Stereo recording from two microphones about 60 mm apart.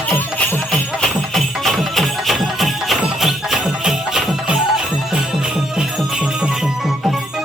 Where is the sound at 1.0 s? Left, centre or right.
Centre.